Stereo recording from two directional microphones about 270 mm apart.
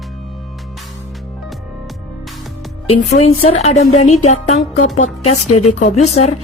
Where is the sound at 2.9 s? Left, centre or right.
Left.